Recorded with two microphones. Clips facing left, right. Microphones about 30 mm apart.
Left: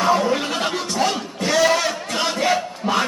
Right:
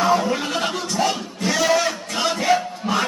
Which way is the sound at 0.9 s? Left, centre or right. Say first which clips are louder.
Even; centre.